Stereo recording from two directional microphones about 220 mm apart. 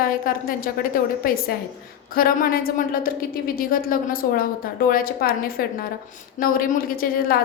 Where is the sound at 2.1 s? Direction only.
40° left (ahead or behind).